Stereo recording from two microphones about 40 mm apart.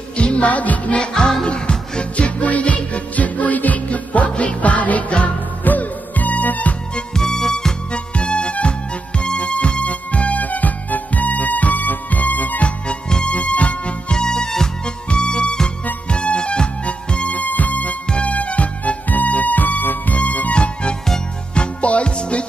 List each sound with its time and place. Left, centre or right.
0.2 s music: left
1.1 s music: left
7.2 s music: centre
7.9 s music: left
12.6 s music: left
14.1 s music: centre
17.3 s music: left
20.5 s music: left